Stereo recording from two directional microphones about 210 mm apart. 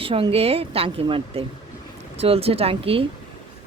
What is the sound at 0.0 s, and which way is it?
Speech, 25° right (ahead or behind).